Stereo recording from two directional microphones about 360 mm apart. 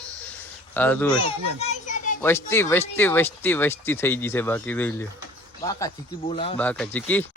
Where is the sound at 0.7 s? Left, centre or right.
Centre.